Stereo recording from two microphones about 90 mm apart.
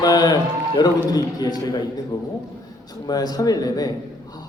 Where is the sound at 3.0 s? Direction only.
45° left (ahead or behind).